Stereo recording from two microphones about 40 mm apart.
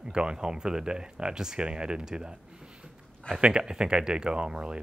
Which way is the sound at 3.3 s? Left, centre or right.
Right.